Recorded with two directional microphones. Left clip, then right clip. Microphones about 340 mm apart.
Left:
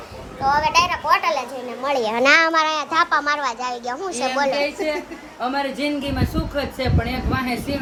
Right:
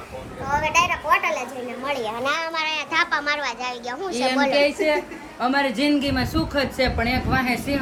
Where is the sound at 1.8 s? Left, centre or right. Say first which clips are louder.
Left 7 dB; left.